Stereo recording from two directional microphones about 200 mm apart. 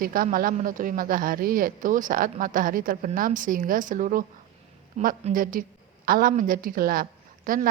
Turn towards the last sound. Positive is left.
turn(degrees=-45)  # may be behind; listen again after turning